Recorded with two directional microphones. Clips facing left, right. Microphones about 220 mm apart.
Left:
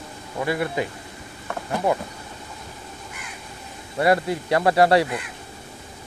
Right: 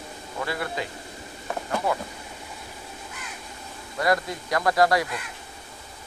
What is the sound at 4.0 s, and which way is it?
Speech, 30° left (ahead or behind).